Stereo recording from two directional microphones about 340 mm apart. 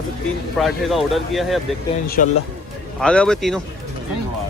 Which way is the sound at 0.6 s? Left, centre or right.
Centre.